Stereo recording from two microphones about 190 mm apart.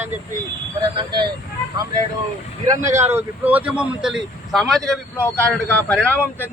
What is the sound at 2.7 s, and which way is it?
Speech, 15° right (ahead or behind).